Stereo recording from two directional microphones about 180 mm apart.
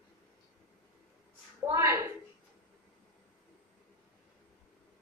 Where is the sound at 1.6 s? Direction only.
15° right (ahead or behind).